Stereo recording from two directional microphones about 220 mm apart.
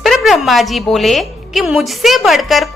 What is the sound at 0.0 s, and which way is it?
A woman's voice, centre (ahead or behind).